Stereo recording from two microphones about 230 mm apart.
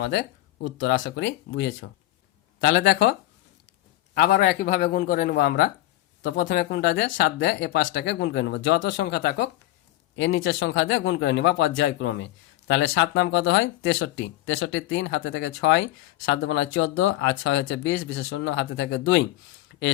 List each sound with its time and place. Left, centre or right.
0.0 s a man's voice: left
10.2 s speech: left